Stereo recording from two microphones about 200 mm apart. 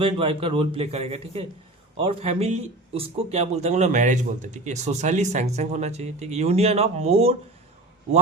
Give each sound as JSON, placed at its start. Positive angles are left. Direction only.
{"t": 0.0, "sound": "a man's voice", "side_deg": -25}